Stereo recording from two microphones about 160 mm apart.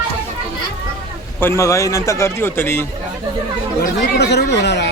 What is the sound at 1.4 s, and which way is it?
A man's voice, 15° left (ahead or behind).